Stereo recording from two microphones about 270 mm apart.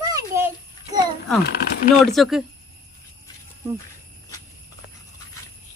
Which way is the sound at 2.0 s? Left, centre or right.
Centre.